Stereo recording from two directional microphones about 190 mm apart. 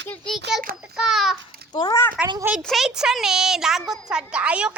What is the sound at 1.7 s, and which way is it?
Speech, 20° left (ahead or behind).